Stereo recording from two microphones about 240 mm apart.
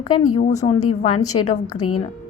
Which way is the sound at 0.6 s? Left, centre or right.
Left.